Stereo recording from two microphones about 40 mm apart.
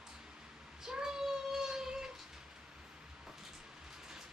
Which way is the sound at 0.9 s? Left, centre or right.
Centre.